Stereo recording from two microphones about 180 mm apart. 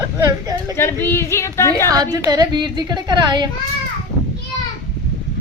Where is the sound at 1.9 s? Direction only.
20° right (ahead or behind).